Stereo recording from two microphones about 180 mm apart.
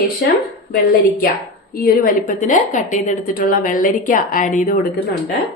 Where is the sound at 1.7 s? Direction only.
50° left (ahead or behind).